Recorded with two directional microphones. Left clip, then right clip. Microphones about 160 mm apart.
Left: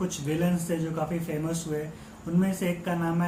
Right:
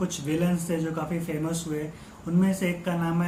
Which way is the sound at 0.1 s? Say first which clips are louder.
Right 1 dB; 20° right (ahead or behind).